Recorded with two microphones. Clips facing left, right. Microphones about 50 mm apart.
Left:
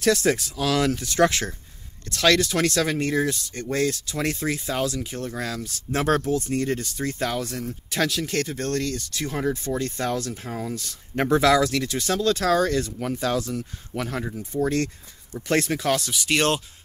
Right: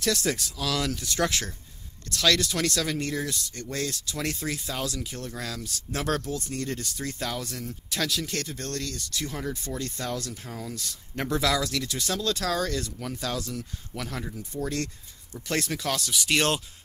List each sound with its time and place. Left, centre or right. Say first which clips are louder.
0.0 s speech: left 6 dB; left
2.7 s speech: left 6 dB; left
8.0 s speech: left 6 dB; left
16.1 s speech: left 3 dB; centre